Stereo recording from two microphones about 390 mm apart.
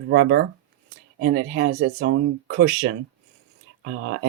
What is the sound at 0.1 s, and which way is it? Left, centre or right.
Speech, right.